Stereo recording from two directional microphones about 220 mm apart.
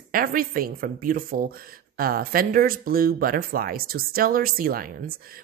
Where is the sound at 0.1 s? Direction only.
40° right (ahead or behind).